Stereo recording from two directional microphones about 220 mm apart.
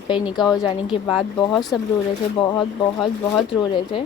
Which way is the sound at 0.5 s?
20° left (ahead or behind).